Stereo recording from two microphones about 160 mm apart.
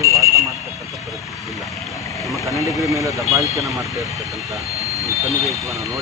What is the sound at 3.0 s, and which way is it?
Speech, 20° right (ahead or behind).